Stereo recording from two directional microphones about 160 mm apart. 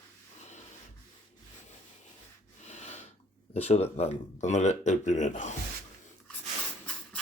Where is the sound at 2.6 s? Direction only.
45° left (ahead or behind).